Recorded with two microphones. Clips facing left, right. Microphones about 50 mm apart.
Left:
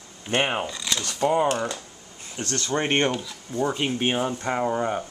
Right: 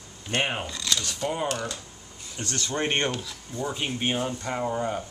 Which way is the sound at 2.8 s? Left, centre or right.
Centre.